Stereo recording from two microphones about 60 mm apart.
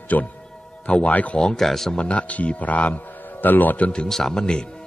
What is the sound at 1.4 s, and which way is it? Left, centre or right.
Speech, centre.